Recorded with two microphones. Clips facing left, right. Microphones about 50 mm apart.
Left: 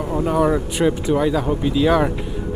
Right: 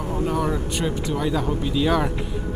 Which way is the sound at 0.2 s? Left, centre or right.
Centre.